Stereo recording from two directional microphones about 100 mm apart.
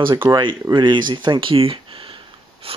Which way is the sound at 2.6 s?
70° right (ahead or behind).